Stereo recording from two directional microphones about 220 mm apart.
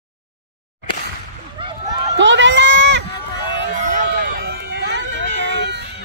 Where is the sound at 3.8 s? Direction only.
40° right (ahead or behind).